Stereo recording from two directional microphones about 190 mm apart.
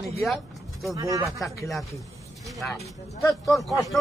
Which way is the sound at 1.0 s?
15° right (ahead or behind).